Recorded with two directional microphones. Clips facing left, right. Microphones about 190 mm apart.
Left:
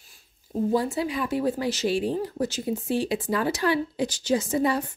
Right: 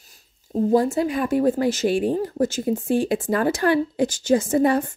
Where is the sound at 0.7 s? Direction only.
45° right (ahead or behind).